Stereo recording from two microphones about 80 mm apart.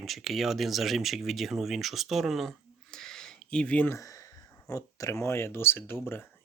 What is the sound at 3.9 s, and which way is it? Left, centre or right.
Speech, left.